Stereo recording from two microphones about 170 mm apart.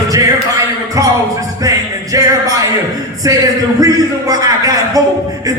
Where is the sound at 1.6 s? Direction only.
20° right (ahead or behind).